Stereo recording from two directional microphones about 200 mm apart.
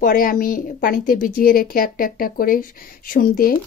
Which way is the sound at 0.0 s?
45° left (ahead or behind).